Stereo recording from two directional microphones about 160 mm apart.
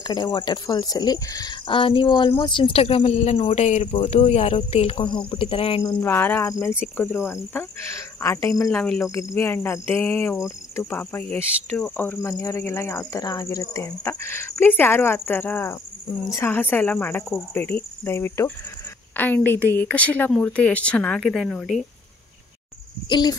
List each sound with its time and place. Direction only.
0.0 s speech: 25° left (ahead or behind)
5.9 s speech: 10° left (ahead or behind)
8.6 s speech: 5° left (ahead or behind)
9.0 s speech: 20° left (ahead or behind); by 21.8 s 5° left (ahead or behind)
23.0 s a child's voice: 25° left (ahead or behind)